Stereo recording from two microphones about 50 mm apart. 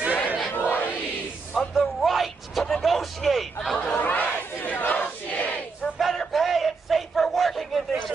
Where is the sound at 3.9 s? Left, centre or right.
Left.